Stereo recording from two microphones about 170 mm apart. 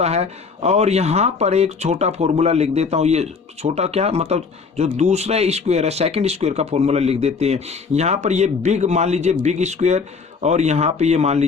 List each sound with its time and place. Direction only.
0.0 s speech: 40° right (ahead or behind)